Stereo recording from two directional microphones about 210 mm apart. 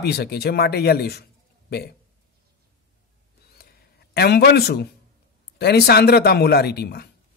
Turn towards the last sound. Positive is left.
turn(degrees=50)  # may be behind; listen again after turning